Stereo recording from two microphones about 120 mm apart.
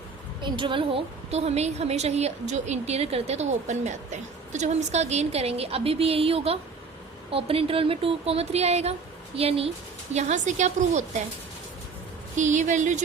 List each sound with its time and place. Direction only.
0.4 s a woman's voice: 45° right (ahead or behind)
10.2 s a woman's voice: 75° right (ahead or behind)
12.4 s speech: 90° right